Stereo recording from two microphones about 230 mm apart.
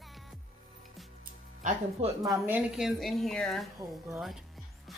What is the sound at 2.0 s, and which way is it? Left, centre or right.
Speech, right.